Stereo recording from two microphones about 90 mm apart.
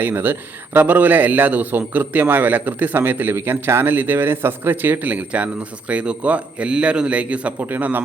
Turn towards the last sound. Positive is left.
turn(degrees=-20)  # may be behind; listen again after turning